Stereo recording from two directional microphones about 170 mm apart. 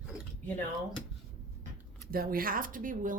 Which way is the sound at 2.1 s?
60° right (ahead or behind).